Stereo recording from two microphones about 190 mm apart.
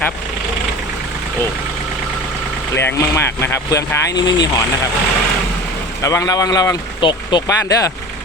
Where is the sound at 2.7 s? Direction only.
15° left (ahead or behind).